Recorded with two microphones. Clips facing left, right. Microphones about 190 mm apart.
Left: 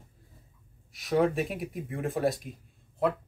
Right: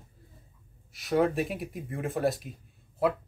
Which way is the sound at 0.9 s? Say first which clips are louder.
Even; centre (ahead or behind).